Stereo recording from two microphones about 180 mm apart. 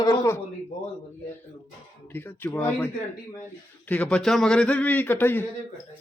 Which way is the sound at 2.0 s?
10° left (ahead or behind).